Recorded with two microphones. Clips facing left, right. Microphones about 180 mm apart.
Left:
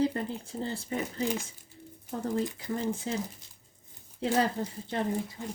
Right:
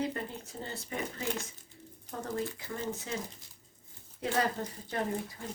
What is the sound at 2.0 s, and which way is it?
Speech, 25° left (ahead or behind).